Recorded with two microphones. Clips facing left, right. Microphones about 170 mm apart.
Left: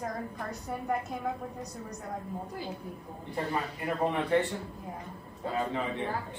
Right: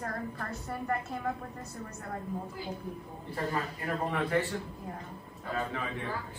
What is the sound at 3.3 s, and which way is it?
A man's voice, 20° left (ahead or behind).